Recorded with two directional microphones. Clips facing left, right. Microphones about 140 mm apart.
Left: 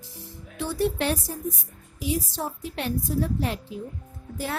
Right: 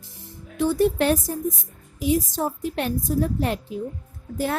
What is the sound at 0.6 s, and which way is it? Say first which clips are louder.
A woman's voice: right 6 dB; 45° right (ahead or behind).